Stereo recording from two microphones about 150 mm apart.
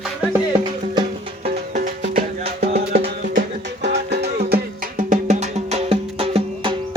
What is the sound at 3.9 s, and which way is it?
Music, 90° right.